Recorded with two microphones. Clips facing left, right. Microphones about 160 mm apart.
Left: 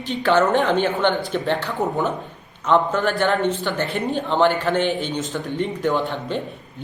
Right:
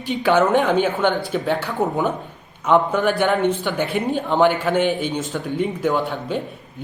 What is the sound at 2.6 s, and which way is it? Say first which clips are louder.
A man's voice: right 2 dB; 10° right (ahead or behind).